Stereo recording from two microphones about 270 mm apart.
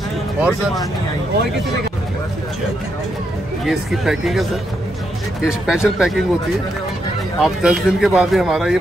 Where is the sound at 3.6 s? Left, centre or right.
Centre.